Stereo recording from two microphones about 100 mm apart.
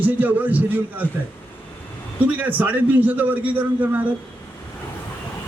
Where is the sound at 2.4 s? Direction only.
15° right (ahead or behind).